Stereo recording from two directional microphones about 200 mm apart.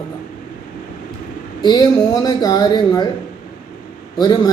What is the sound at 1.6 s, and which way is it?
Speech, 20° left (ahead or behind).